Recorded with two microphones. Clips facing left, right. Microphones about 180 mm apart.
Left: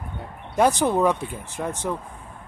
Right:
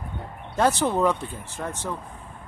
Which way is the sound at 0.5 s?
15° left (ahead or behind).